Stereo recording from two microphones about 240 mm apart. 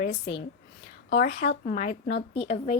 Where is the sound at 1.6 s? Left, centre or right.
Left.